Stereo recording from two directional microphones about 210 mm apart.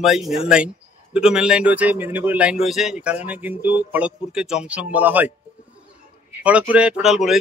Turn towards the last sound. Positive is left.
turn(degrees=0)  # may be behind; listen again after turning